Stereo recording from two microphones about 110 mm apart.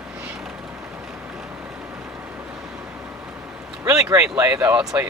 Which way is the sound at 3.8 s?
30° right (ahead or behind).